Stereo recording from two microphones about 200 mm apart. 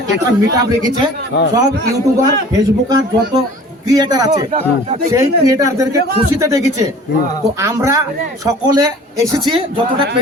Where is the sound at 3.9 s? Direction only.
20° right (ahead or behind).